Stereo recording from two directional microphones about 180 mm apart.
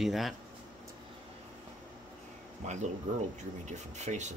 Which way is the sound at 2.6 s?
40° right (ahead or behind).